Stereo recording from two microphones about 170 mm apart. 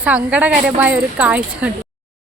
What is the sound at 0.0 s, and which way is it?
A woman's voice, 5° right (ahead or behind).